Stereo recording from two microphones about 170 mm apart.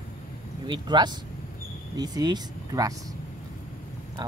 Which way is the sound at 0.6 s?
25° right (ahead or behind).